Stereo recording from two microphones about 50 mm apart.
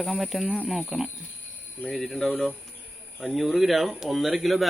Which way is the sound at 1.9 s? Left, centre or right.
Centre.